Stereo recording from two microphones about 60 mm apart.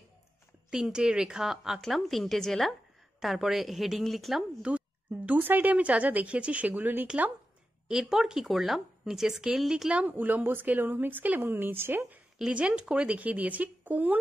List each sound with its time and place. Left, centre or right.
0.7 s a woman's voice: centre
4.6 s speech: centre
7.9 s speech: centre
9.9 s a woman's voice: right
12.4 s speech: centre